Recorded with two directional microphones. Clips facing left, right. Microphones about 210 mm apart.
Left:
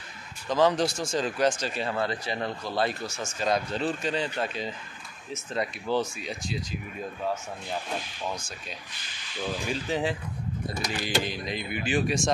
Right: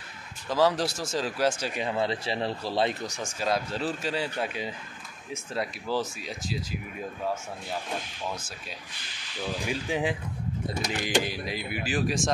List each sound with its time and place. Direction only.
0.5 s speech: 5° right (ahead or behind)
1.6 s speech: 15° right (ahead or behind)
3.4 s speech: 5° right (ahead or behind)
9.7 s speech: 10° right (ahead or behind)